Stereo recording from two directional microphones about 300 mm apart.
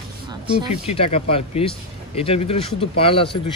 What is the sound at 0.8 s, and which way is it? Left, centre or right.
Speech, centre.